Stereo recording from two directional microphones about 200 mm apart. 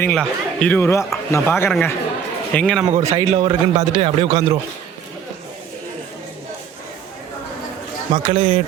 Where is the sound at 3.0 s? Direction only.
15° right (ahead or behind).